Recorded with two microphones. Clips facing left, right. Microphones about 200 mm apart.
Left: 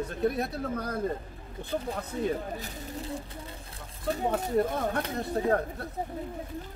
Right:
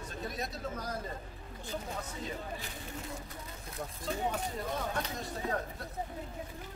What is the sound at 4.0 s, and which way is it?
Speech, 60° left (ahead or behind).